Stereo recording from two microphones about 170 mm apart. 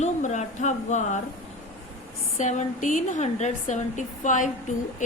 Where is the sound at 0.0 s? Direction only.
40° left (ahead or behind).